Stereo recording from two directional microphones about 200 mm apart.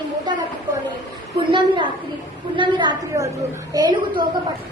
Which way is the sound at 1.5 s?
25° right (ahead or behind).